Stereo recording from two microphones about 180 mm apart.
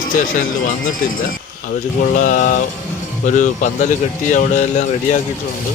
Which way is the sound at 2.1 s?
45° left (ahead or behind).